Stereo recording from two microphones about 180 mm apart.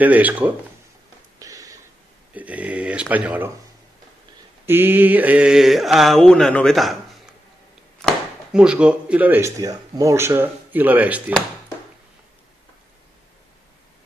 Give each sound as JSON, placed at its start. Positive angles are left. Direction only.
{"t": 0.0, "sound": "speech", "side_deg": -10}
{"t": 1.4, "sound": "a sound", "side_deg": -20}
{"t": 2.3, "sound": "speech", "side_deg": -10}
{"t": 4.6, "sound": "mantra", "side_deg": -10}
{"t": 8.0, "sound": "speech", "side_deg": -5}